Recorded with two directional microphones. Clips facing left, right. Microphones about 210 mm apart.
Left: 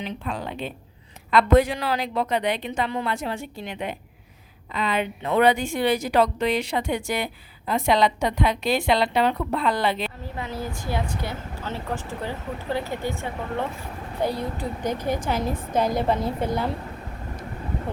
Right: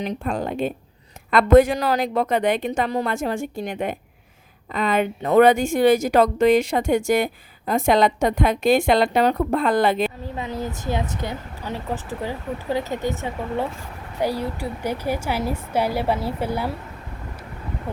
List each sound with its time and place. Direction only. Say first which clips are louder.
0.0 s a woman's voice: right 5 dB; 45° right (ahead or behind)
10.3 s a woman's voice: right 3 dB; 20° right (ahead or behind)